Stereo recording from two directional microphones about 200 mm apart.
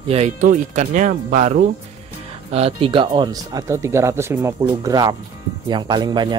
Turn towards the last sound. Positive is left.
turn(degrees=-20)  # may be behind; listen again after turning